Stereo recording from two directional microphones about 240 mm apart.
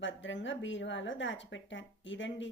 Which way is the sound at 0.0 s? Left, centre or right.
Left.